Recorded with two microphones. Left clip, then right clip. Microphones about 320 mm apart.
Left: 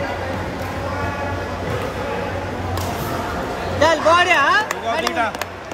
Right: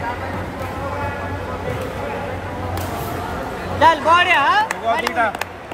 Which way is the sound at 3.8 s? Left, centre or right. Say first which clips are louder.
Right 1 dB; right.